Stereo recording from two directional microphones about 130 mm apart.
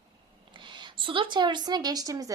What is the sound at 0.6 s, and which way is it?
Speech, 35° right (ahead or behind).